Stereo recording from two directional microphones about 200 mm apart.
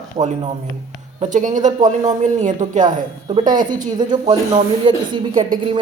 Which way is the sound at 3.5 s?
40° right (ahead or behind).